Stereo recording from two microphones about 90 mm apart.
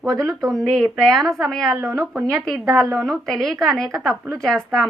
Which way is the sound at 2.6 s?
35° right (ahead or behind).